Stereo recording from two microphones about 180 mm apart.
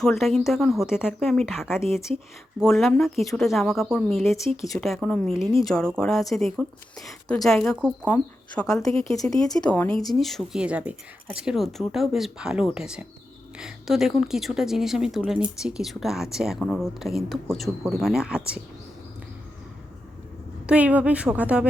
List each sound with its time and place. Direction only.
0.0 s speech: centre (ahead or behind)
9.3 s speech: 20° left (ahead or behind); by 18.6 s 5° right (ahead or behind)
20.7 s a woman's voice: 10° right (ahead or behind)